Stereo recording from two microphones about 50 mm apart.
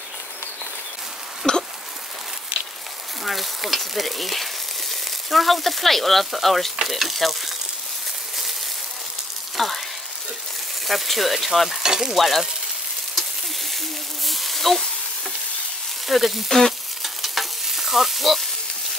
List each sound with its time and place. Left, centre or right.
1.5 s a sound: centre
3.3 s frying: centre
9.6 s frying: centre
10.9 s frying: centre
12.2 s frying: centre
14.2 s sizzle: centre
16.1 s frying: centre